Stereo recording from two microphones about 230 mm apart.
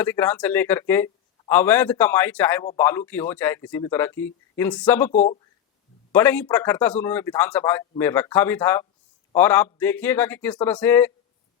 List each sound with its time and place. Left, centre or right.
0.0 s a man's voice: centre
5.1 s speech: left
6.1 s a man's voice: centre